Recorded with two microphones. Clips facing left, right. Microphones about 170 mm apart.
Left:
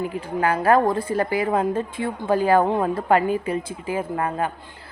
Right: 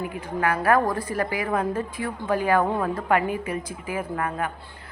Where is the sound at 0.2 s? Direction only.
30° left (ahead or behind).